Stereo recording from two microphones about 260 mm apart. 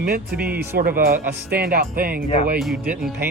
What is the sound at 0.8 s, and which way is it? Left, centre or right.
Music, right.